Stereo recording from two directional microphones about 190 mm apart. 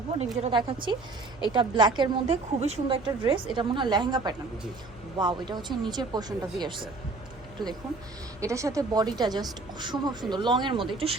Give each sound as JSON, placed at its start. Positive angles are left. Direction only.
{"t": 0.4, "sound": "a woman's voice", "side_deg": -25}
{"t": 2.0, "sound": "a woman's voice", "side_deg": -35}
{"t": 7.6, "sound": "speech", "side_deg": 0}
{"t": 8.4, "sound": "a woman's voice", "side_deg": -15}